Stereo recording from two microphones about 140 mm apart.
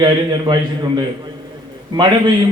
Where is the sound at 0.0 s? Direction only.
30° right (ahead or behind).